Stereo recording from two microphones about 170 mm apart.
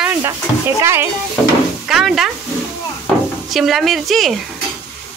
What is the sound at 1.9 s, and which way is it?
Speech, centre (ahead or behind).